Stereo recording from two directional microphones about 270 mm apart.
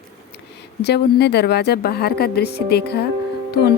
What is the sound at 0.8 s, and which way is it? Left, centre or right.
Speech, left.